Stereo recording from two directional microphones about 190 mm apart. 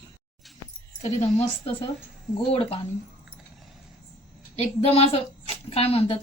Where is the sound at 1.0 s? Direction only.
35° left (ahead or behind).